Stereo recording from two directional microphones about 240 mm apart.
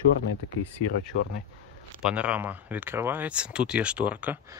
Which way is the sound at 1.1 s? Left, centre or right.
Left.